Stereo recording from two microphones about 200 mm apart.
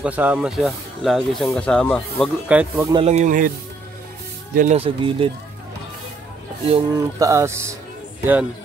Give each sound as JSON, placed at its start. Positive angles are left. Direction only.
{"t": 0.0, "sound": "speech", "side_deg": -5}
{"t": 2.9, "sound": "speech", "side_deg": -30}
{"t": 4.6, "sound": "speech", "side_deg": -30}
{"t": 6.6, "sound": "speech", "side_deg": -25}
{"t": 7.0, "sound": "music", "side_deg": -15}